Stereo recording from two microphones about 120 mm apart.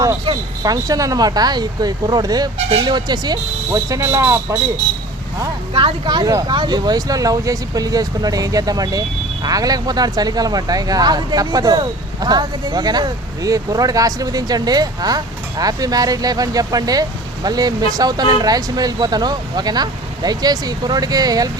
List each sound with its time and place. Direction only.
0.3 s speech: 50° right (ahead or behind)
0.6 s speech: 30° right (ahead or behind)
5.7 s speech: 45° right (ahead or behind)